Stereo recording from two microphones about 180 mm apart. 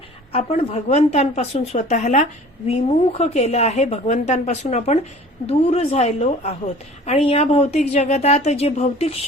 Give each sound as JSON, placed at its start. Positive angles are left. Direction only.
{"t": 0.3, "sound": "speech", "side_deg": 35}